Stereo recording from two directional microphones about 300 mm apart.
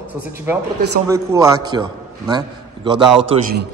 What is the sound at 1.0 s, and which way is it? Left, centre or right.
A man's voice, centre.